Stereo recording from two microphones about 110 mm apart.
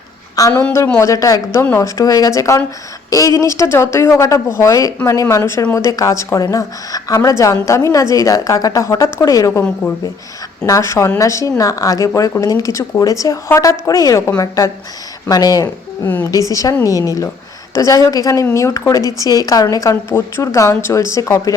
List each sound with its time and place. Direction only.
0.3 s a woman's voice: 35° left (ahead or behind)
16.0 s a woman's voice: 20° left (ahead or behind)
16.5 s a woman's voice: 30° left (ahead or behind)